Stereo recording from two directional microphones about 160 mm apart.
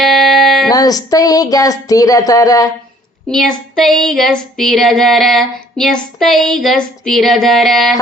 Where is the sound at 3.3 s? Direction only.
Centre (ahead or behind).